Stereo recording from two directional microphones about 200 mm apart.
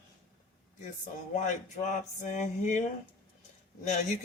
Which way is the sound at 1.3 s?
35° left (ahead or behind).